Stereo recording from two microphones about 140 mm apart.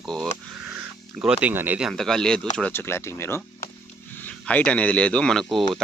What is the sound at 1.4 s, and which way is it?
Speech, 15° right (ahead or behind).